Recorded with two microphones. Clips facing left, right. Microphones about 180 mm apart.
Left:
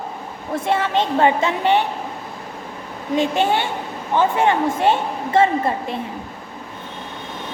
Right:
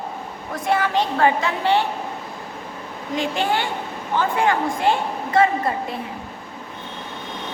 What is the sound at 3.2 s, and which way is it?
A woman's voice, 20° left (ahead or behind).